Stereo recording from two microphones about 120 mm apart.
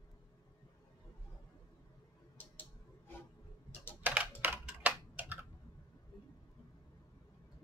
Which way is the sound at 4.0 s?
15° right (ahead or behind).